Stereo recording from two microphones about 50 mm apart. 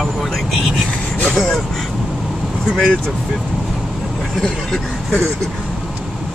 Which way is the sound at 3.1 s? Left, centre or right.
Centre.